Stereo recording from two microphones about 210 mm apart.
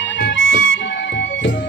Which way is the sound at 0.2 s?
60° left (ahead or behind).